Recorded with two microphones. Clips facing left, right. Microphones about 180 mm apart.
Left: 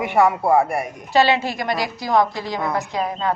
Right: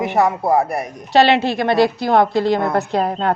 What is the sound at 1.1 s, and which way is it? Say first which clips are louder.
A woman's voice: right 4 dB; 70° right (ahead or behind).